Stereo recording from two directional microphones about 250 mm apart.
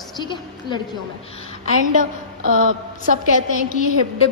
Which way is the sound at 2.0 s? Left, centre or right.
Right.